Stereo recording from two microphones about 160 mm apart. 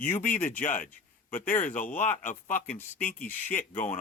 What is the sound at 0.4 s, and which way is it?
A man's voice, 55° left (ahead or behind).